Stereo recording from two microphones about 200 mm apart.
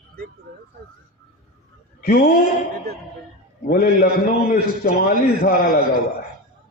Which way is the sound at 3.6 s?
45° left (ahead or behind).